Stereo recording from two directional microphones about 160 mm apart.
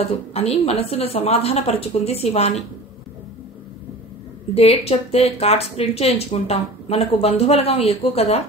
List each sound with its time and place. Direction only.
0.1 s speech: 40° left (ahead or behind)
4.6 s speech: 40° left (ahead or behind)